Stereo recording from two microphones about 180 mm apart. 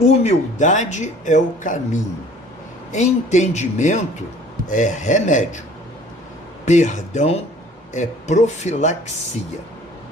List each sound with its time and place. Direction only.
0.2 s speech: 40° left (ahead or behind)
6.7 s speech: 40° left (ahead or behind)